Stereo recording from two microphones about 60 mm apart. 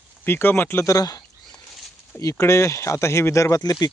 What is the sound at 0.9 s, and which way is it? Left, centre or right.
Speech, left.